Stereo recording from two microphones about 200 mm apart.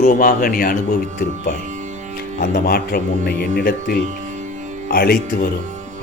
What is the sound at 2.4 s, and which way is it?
Speech, 50° left (ahead or behind).